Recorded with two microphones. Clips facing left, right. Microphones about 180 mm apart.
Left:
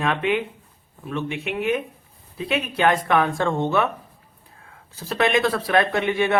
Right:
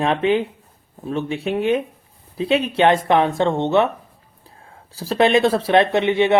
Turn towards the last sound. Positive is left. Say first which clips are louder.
# right 5 dB
turn(degrees=-25)  # may be behind; listen again after turning